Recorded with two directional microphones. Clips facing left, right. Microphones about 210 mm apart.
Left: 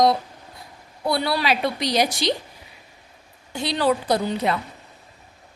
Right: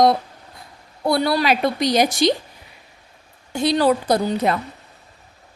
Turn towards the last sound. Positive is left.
turn(degrees=-45)  # may be behind; listen again after turning